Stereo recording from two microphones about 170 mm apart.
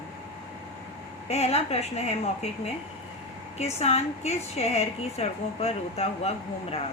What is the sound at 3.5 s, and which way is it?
A woman's voice, 40° left (ahead or behind).